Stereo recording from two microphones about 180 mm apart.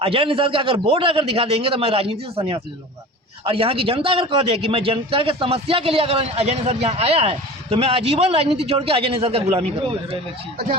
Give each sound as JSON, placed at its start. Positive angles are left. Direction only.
{"t": 0.0, "sound": "a man's voice", "side_deg": -30}